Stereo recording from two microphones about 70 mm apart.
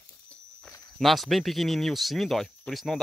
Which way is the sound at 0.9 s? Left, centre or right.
Centre.